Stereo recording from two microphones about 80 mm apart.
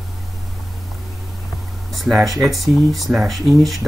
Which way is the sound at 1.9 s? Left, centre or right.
Centre.